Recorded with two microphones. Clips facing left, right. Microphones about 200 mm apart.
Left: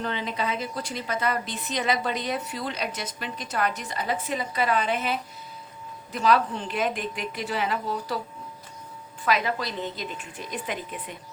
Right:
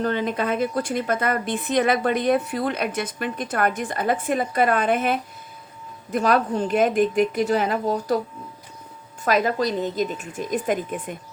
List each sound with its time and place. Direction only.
0.0 s a woman's voice: 50° right (ahead or behind)
9.2 s a woman's voice: 45° right (ahead or behind)